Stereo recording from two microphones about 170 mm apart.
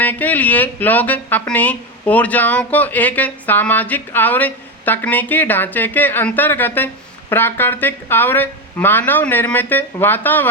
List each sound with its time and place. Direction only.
0.0 s speech: 10° left (ahead or behind)